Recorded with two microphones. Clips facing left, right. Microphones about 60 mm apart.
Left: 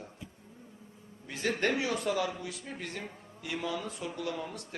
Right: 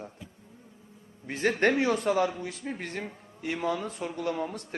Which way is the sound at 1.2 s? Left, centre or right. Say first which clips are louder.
Right 6 dB; right.